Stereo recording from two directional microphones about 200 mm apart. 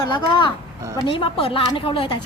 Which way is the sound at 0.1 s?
25° left (ahead or behind).